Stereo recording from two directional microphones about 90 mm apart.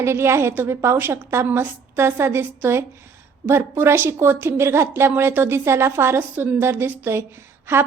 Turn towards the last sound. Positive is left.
turn(degrees=-25)  # may be behind; listen again after turning